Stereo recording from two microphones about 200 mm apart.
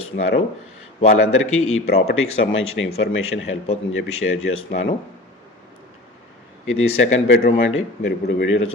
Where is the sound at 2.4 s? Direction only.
85° left.